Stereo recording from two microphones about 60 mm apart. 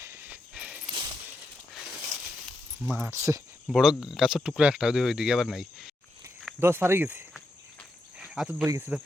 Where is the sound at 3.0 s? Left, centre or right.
Right.